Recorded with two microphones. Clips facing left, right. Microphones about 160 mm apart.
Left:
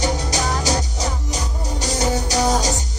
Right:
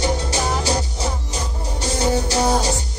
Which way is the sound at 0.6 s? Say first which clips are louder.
Even; 40° left (ahead or behind).